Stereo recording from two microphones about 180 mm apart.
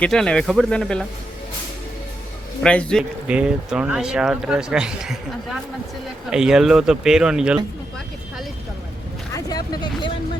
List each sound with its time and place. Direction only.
0.0 s speech: 5° left (ahead or behind)
2.6 s speech: 5° left (ahead or behind)
3.0 s speech: 5° right (ahead or behind)
9.3 s vehicle: 20° left (ahead or behind)